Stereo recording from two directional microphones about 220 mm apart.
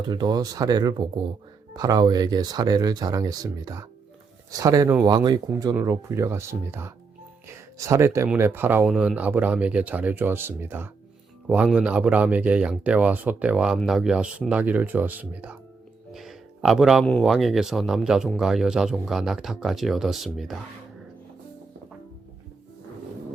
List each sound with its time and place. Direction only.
0.1 s speech: 20° right (ahead or behind); by 20.6 s centre (ahead or behind)